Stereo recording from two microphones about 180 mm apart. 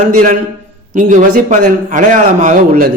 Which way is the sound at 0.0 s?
45° right (ahead or behind).